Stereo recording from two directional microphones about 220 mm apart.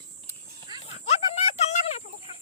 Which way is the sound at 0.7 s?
20° right (ahead or behind).